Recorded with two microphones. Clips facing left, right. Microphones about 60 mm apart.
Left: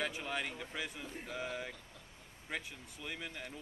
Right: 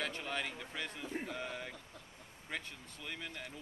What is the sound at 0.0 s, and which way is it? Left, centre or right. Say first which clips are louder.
Speech: left 1 dB; centre.